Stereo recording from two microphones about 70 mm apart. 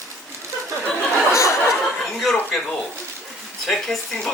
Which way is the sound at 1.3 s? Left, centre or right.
Left.